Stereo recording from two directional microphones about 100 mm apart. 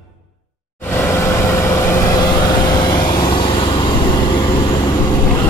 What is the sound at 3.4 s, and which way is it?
Vehicle, 55° left (ahead or behind).